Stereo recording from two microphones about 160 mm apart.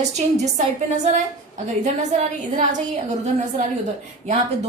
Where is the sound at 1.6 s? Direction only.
45° right (ahead or behind).